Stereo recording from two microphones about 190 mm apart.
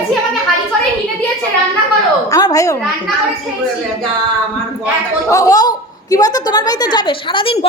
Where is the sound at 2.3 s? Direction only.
20° left (ahead or behind).